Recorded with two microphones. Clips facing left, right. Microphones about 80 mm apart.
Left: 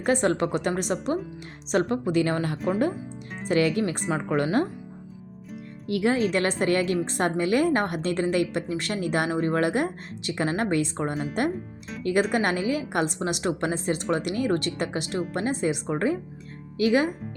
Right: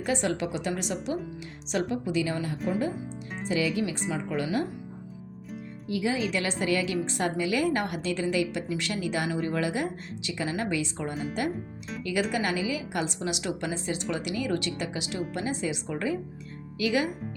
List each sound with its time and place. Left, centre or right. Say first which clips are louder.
0.0 s a woman's voice: left 5 dB; left
5.9 s a woman's voice: left 5 dB; left
11.1 s speech: left 3 dB; centre
12.3 s a woman's voice: left 4 dB; left